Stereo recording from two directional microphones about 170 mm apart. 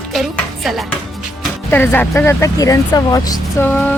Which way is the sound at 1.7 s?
10° left (ahead or behind).